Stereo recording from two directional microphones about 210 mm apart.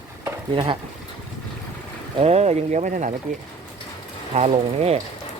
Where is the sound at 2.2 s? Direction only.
30° right (ahead or behind).